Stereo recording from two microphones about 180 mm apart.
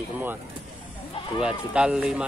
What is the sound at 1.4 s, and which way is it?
Speech, 5° right (ahead or behind).